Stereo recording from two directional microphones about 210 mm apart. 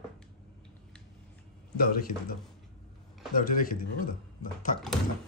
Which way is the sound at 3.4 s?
40° left (ahead or behind).